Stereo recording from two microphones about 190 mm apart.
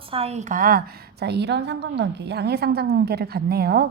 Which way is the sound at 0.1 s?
35° right (ahead or behind).